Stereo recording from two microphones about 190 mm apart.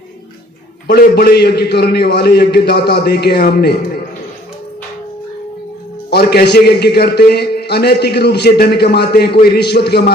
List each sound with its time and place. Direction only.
0.9 s a man's voice: 50° left (ahead or behind)
6.1 s a man's voice: 55° left (ahead or behind)